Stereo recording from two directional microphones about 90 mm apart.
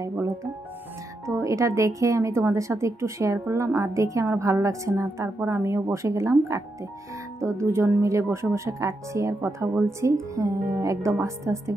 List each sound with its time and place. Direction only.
1.2 s speech: 35° right (ahead or behind)